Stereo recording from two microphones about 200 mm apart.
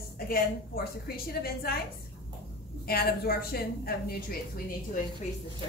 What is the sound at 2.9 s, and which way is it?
A woman's voice, 50° left (ahead or behind).